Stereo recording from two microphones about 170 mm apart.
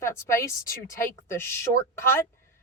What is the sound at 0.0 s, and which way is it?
Speech, 15° left (ahead or behind).